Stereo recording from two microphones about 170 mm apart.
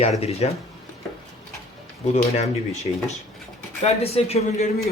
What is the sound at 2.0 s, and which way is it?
Speech, 40° left (ahead or behind).